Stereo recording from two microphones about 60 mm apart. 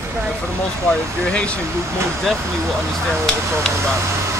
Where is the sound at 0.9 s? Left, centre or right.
Centre.